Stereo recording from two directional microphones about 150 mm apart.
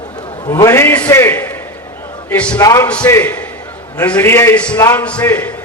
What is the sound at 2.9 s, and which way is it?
A man's voice, 10° left (ahead or behind).